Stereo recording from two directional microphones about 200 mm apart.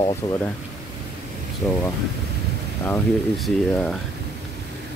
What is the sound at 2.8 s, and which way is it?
Speech, 5° left (ahead or behind).